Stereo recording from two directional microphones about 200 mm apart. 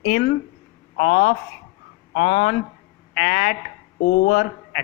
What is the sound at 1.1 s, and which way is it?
Speech, 70° left (ahead or behind).